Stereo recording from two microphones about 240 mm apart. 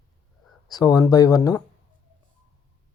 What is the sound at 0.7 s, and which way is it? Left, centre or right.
Speech, centre.